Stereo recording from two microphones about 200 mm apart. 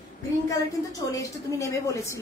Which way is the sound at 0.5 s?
15° left (ahead or behind).